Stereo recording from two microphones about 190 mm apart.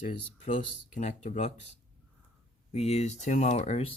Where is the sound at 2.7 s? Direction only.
35° left (ahead or behind).